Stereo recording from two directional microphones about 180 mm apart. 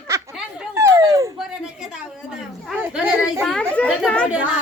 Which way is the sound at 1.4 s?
5° right (ahead or behind).